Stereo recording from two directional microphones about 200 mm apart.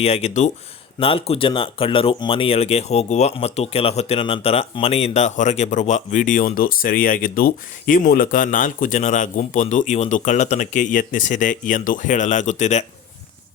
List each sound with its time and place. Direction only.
0.0 s speech: 30° left (ahead or behind)